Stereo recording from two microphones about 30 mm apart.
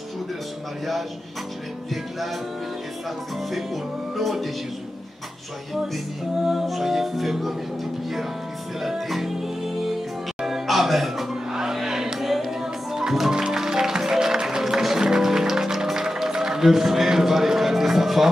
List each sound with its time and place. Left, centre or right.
3.4 s music: centre
6.6 s music: centre
8.8 s music: centre
11.7 s a sound: centre
12.2 s music: centre